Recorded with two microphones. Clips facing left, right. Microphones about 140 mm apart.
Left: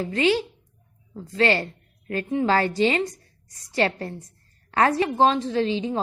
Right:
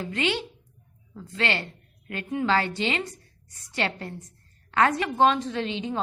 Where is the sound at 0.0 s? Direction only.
35° left (ahead or behind).